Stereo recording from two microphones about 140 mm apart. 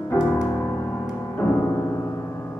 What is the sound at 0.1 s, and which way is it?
Music, 15° left (ahead or behind).